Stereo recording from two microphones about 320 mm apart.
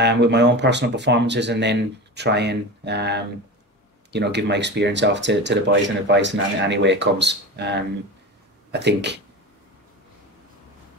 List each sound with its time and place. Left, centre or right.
0.0 s speech: right